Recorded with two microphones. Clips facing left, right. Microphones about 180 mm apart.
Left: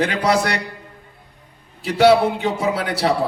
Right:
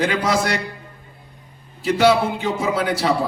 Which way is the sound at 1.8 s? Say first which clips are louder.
Left 2 dB; 65° left (ahead or behind).